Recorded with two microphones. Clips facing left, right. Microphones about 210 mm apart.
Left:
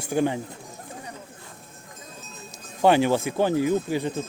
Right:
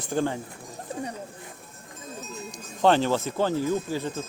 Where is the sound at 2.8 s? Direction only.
10° left (ahead or behind).